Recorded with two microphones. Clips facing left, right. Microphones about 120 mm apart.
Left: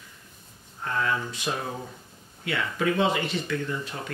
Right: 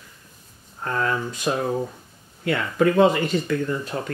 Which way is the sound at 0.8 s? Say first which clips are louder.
Right 3 dB; 45° right (ahead or behind).